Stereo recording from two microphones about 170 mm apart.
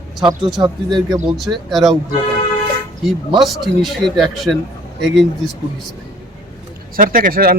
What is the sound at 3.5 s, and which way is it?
Speech, centre (ahead or behind).